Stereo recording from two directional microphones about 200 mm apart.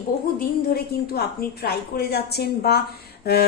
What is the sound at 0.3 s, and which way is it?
A woman's voice, 50° left (ahead or behind).